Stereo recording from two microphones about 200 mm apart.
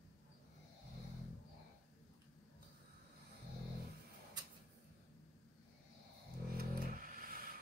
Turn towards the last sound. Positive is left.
turn(degrees=-45)  # may be behind; listen again after turning